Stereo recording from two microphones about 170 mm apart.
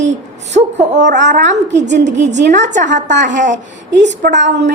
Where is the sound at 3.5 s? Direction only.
90° right.